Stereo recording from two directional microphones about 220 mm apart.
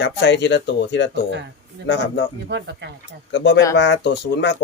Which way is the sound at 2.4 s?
50° right (ahead or behind).